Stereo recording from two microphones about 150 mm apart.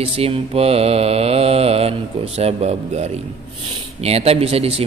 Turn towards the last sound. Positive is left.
turn(degrees=-40)  # may be behind; listen again after turning